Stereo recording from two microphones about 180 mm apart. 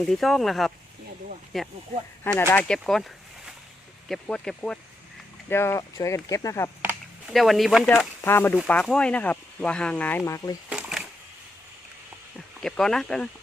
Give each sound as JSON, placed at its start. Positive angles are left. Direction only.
{"t": 0.0, "sound": "speech", "side_deg": 0}
{"t": 2.2, "sound": "speech", "side_deg": 15}
{"t": 7.3, "sound": "speech", "side_deg": 0}
{"t": 7.9, "sound": "speech", "side_deg": 10}
{"t": 10.7, "sound": "a sound", "side_deg": -5}
{"t": 12.5, "sound": "speech", "side_deg": 5}